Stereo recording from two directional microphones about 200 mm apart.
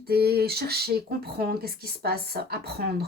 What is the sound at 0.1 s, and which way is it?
A woman's voice, 50° right (ahead or behind).